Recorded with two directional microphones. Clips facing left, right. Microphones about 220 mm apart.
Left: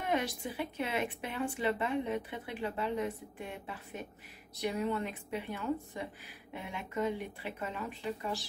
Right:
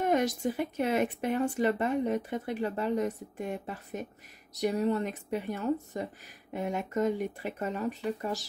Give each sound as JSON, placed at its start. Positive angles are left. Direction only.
{"t": 0.0, "sound": "speech", "side_deg": -45}